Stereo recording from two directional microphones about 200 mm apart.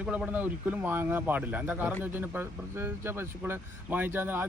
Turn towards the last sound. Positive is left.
turn(degrees=-10)  # may be behind; listen again after turning